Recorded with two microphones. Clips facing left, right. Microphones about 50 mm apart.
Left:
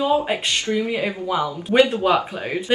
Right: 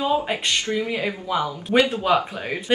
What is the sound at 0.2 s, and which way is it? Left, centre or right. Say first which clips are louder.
Speech: left 1 dB; centre.